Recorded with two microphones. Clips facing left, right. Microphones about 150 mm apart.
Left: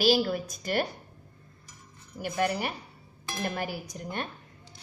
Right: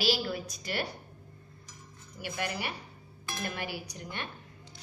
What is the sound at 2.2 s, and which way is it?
A woman's voice, 45° left (ahead or behind).